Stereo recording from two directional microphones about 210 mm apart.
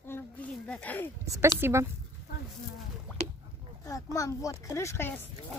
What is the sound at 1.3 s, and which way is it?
Speech, 10° right (ahead or behind).